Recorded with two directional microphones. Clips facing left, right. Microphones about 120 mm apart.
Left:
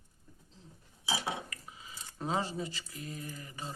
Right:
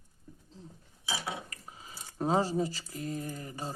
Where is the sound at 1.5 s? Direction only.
40° right (ahead or behind).